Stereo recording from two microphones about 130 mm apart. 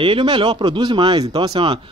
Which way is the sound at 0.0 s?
40° right (ahead or behind).